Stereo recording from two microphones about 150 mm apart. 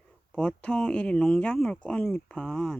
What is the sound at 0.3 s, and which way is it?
Speech, 5° left (ahead or behind).